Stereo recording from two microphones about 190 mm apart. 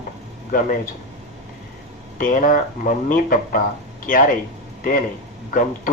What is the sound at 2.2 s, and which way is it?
Speech, 45° left (ahead or behind).